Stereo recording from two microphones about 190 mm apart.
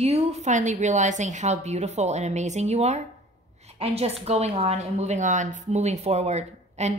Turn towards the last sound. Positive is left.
turn(degrees=-35)  # may be behind; listen again after turning